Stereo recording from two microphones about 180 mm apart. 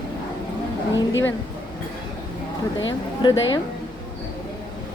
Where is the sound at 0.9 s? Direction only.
90° left.